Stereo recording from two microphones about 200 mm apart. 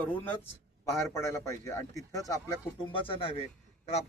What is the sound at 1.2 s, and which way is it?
Speech, 15° left (ahead or behind).